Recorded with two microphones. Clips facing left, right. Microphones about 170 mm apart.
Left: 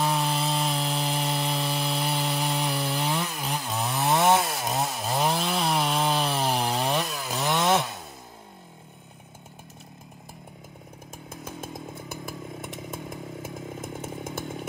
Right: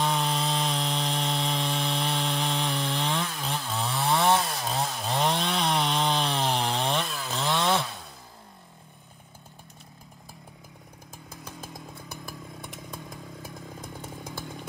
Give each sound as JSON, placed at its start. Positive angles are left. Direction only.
{"t": 0.0, "sound": "sawing", "side_deg": 5}
{"t": 4.5, "sound": "chainsaw", "side_deg": 20}
{"t": 4.9, "sound": "chainsaw", "side_deg": 5}
{"t": 11.2, "sound": "chainsaw", "side_deg": 25}